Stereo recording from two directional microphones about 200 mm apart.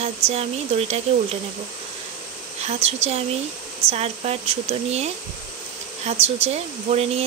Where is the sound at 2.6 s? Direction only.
30° right (ahead or behind).